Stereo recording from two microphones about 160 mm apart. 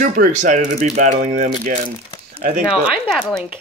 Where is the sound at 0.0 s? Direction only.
55° right (ahead or behind).